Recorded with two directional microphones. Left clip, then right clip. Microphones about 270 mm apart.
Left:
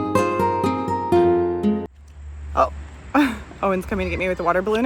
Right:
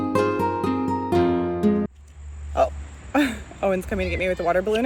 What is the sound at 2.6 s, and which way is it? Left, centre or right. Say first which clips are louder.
Speech: left 2 dB; centre.